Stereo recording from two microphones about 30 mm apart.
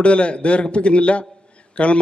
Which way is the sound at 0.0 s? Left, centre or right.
Left.